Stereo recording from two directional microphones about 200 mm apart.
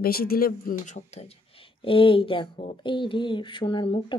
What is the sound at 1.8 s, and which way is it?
Speech, 25° left (ahead or behind).